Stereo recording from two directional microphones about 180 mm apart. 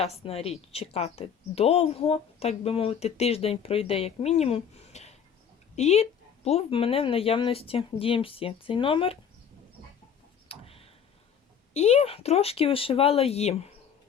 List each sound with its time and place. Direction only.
0.0 s a woman's voice: 35° left (ahead or behind)
10.5 s tick-tock: 30° left (ahead or behind)
11.7 s a woman's voice: 35° left (ahead or behind)